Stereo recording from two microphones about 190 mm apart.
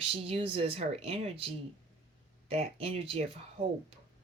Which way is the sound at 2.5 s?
30° right (ahead or behind).